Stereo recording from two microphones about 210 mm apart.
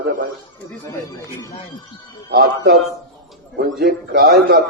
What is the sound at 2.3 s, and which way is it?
Speech, 50° right (ahead or behind).